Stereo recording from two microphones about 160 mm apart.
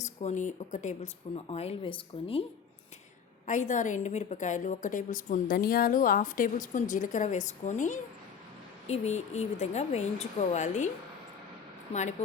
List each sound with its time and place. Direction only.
0.0 s a woman's voice: 45° left (ahead or behind)
3.4 s a woman's voice: 50° left (ahead or behind)